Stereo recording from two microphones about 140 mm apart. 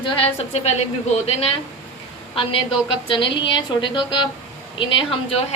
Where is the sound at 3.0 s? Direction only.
35° left (ahead or behind).